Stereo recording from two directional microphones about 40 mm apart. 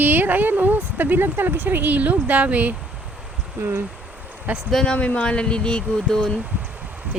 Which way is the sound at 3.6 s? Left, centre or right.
Right.